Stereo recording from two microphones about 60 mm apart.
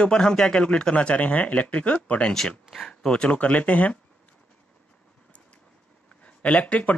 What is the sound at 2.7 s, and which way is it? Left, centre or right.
Speech, centre.